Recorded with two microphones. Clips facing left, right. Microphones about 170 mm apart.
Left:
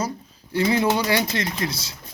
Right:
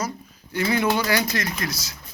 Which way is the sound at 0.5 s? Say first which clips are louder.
Left 2 dB; 25° left (ahead or behind).